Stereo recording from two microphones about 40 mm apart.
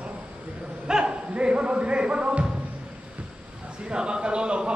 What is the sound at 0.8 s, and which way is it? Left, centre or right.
Music, right.